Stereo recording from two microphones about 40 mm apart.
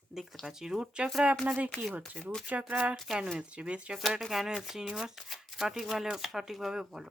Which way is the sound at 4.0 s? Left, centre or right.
Centre.